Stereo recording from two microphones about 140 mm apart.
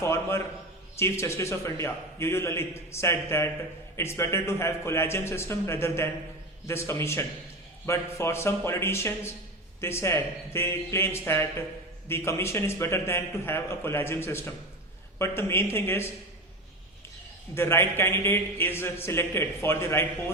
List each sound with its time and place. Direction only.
0.0 s a man's voice: 20° left (ahead or behind)
17.5 s a man's voice: 15° left (ahead or behind)